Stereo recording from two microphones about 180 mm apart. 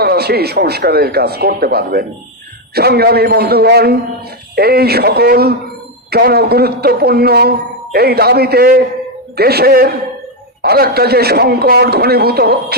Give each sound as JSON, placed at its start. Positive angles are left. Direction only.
{"t": 0.0, "sound": "speech", "side_deg": -60}